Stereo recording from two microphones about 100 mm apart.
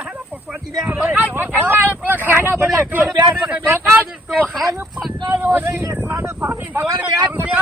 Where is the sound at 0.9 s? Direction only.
15° right (ahead or behind).